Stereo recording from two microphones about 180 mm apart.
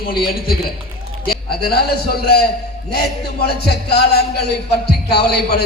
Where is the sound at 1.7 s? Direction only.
60° left (ahead or behind).